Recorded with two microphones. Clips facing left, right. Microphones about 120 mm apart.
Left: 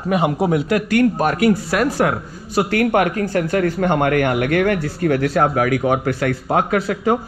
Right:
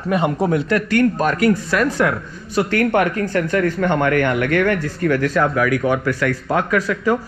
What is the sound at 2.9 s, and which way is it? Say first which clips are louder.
Speech: even; 15° left (ahead or behind).